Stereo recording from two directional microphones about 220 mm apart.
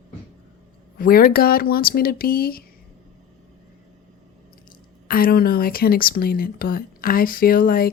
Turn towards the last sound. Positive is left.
turn(degrees=40)  # may be behind; listen again after turning